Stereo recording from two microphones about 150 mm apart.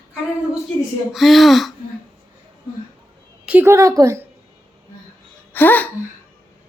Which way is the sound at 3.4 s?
15° right (ahead or behind).